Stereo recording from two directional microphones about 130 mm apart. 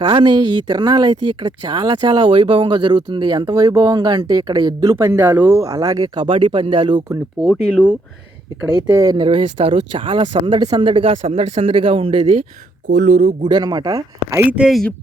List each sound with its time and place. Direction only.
0.0 s speech: 35° right (ahead or behind)
7.4 s speech: centre (ahead or behind)
8.9 s speech: 25° right (ahead or behind)
9.2 s speech: 40° right (ahead or behind)
12.9 s speech: 65° right (ahead or behind)
13.4 s speech: 35° right (ahead or behind)
14.5 s speech: 10° right (ahead or behind)